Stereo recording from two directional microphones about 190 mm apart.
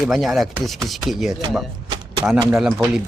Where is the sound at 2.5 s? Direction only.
Centre (ahead or behind).